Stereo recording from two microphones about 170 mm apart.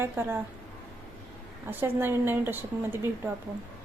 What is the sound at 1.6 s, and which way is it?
Speech, 10° right (ahead or behind).